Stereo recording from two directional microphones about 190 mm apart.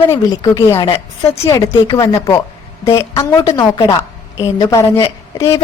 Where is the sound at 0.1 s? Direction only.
20° left (ahead or behind).